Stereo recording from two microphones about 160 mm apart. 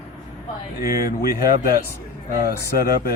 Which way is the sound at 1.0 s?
70° left (ahead or behind).